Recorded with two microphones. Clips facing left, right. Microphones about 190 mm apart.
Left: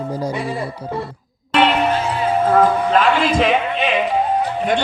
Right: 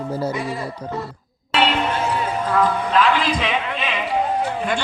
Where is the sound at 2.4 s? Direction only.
45° left (ahead or behind).